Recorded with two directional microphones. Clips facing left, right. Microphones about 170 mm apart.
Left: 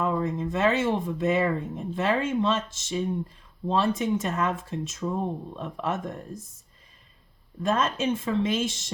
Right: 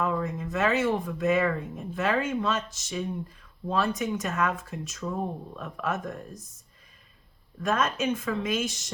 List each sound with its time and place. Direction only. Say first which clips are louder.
0.0 s speech: left 2 dB; 25° left (ahead or behind)
7.6 s speech: left 1 dB; 30° left (ahead or behind)